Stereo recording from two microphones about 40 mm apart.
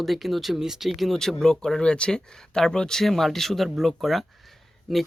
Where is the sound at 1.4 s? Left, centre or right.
Centre.